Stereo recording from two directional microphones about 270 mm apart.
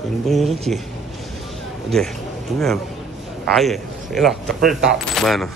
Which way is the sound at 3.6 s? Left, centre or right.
Centre.